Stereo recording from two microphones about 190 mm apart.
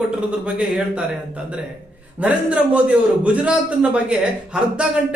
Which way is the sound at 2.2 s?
5° right (ahead or behind).